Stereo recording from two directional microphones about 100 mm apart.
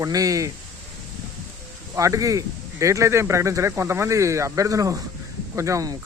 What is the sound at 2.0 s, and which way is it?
Speech, 35° right (ahead or behind).